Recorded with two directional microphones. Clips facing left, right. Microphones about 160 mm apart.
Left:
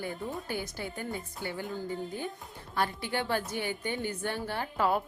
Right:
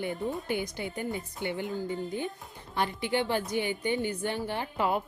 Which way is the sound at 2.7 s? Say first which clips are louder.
Right 2 dB; 15° right (ahead or behind).